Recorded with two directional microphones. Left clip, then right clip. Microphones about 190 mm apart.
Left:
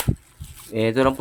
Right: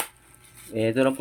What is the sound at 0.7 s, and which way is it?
Speech, 25° left (ahead or behind).